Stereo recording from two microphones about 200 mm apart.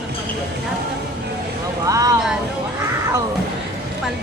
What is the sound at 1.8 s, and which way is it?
Vehicle, 15° right (ahead or behind).